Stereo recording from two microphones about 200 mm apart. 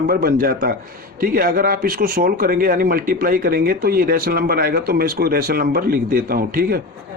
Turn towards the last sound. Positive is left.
turn(degrees=-45)  # may be behind; listen again after turning